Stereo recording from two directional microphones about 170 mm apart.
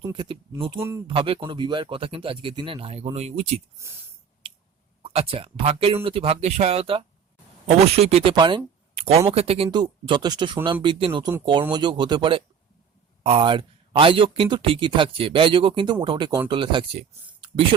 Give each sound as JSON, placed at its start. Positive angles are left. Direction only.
{"t": 0.0, "sound": "speech", "side_deg": -25}
{"t": 0.8, "sound": "speech", "side_deg": -15}
{"t": 1.0, "sound": "a man's voice", "side_deg": -30}
{"t": 3.8, "sound": "speech", "side_deg": -15}
{"t": 4.4, "sound": "a sound", "side_deg": -30}
{"t": 5.0, "sound": "a man's voice", "side_deg": -35}
{"t": 9.6, "sound": "speech", "side_deg": -25}
{"t": 17.4, "sound": "a sound", "side_deg": -30}